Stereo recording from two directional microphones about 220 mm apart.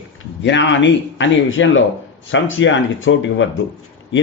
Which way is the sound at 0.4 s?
55° left (ahead or behind).